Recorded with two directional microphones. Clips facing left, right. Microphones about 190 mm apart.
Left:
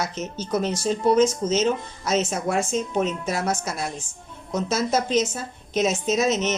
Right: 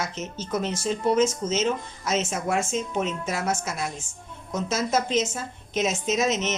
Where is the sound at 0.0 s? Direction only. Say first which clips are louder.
Left 3 dB; 35° left (ahead or behind).